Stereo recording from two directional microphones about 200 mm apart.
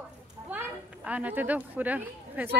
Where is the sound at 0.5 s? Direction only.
5° right (ahead or behind).